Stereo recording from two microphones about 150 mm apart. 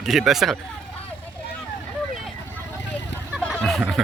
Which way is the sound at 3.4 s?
5° left (ahead or behind).